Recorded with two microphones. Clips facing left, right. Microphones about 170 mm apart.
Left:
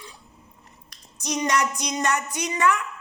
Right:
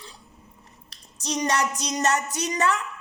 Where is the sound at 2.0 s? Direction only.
35° right (ahead or behind).